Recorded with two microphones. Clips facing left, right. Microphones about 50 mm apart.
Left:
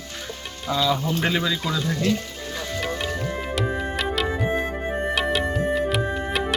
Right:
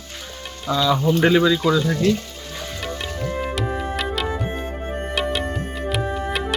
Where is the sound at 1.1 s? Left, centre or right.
Centre.